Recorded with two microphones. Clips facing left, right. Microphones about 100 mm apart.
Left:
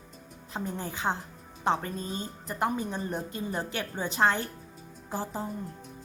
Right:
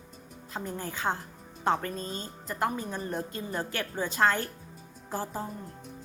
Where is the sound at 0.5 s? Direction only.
20° left (ahead or behind).